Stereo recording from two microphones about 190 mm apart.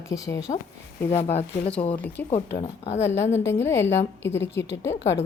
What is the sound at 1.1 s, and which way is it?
Speech, 35° left (ahead or behind).